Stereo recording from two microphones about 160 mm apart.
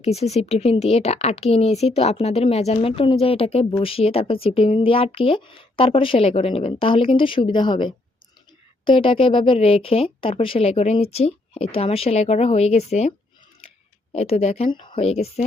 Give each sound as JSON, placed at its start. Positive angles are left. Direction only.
{"t": 0.0, "sound": "speech", "side_deg": 40}